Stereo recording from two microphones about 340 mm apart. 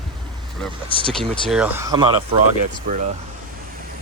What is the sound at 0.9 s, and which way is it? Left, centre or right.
Speech, centre.